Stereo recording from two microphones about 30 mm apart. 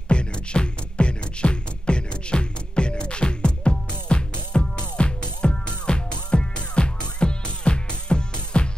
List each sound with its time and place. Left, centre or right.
0.1 s music: left